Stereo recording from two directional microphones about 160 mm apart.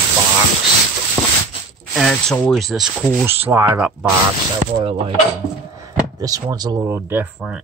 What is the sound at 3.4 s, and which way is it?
Speech, 15° right (ahead or behind).